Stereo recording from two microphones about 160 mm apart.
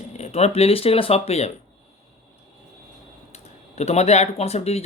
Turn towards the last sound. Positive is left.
turn(degrees=40)  # may be behind; listen again after turning